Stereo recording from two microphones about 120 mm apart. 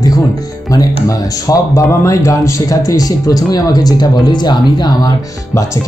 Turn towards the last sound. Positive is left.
turn(degrees=35)  # may be behind; listen again after turning